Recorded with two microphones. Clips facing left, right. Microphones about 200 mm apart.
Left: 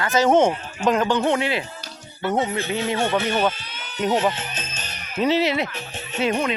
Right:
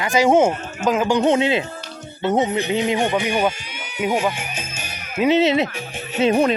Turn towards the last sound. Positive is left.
turn(degrees=-25)  # may be behind; listen again after turning